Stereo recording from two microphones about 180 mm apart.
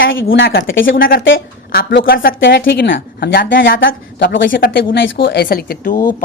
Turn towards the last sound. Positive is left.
turn(degrees=50)  # may be behind; listen again after turning